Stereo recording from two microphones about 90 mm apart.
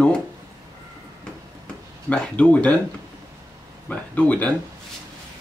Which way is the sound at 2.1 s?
15° left (ahead or behind).